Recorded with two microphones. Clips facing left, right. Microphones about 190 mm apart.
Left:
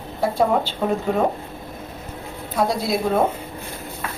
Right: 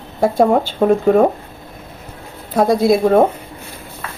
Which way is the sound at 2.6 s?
50° right (ahead or behind).